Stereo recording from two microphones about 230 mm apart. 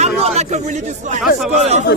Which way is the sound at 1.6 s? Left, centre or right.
Right.